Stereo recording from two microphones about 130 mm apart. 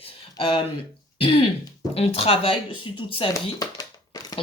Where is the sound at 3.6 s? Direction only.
25° left (ahead or behind).